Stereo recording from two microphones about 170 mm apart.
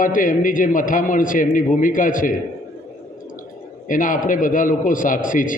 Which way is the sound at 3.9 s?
50° left (ahead or behind).